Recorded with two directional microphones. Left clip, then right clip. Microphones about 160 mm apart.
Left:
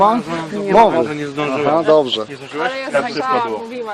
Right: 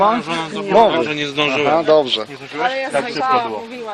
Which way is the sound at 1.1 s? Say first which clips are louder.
Right 3 dB; 30° right (ahead or behind).